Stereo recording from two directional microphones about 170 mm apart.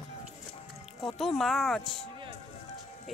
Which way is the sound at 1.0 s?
Centre (ahead or behind).